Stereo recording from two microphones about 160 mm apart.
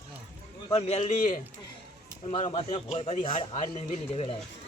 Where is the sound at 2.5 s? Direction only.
40° left (ahead or behind).